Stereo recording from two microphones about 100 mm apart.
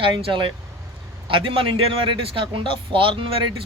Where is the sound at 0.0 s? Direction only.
60° right (ahead or behind).